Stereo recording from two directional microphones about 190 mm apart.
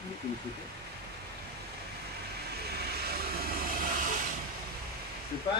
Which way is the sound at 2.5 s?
60° right (ahead or behind).